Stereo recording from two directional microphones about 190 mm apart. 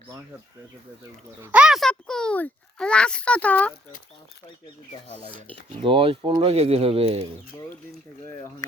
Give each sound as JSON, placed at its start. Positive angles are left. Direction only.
{"t": 1.4, "sound": "a child's voice", "side_deg": -5}
{"t": 5.8, "sound": "speech", "side_deg": -30}